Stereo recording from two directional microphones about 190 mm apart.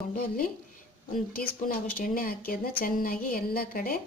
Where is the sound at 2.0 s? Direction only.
50° left (ahead or behind).